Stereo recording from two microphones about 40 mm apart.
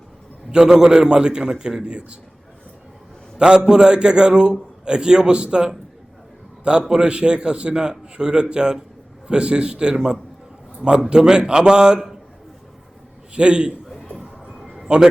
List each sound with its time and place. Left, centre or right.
0.5 s a man's voice: centre
3.3 s a man's voice: right
13.3 s a man's voice: right
14.8 s a man's voice: right